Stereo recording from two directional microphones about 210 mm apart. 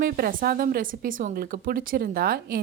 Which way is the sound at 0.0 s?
40° right (ahead or behind).